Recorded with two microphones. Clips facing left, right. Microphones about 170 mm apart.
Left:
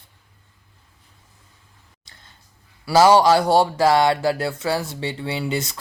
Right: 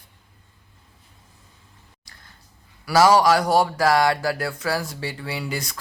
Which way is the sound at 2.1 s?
25° left (ahead or behind).